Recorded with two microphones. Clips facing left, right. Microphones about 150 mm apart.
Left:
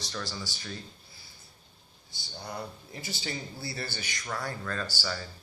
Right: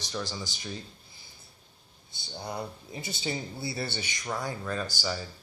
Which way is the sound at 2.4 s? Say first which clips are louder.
Right 3 dB; 20° right (ahead or behind).